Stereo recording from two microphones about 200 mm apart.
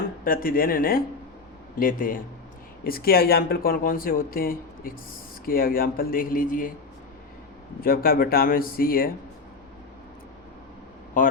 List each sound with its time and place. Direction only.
0.3 s speech: 45° left (ahead or behind)
7.8 s speech: 45° left (ahead or behind)
11.2 s speech: 45° left (ahead or behind)